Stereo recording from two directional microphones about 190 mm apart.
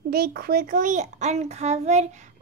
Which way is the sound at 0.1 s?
55° right (ahead or behind).